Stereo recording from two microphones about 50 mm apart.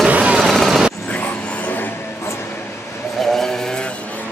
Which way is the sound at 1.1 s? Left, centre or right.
Left.